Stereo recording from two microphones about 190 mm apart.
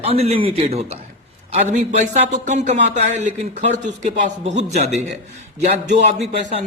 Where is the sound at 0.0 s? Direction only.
35° right (ahead or behind).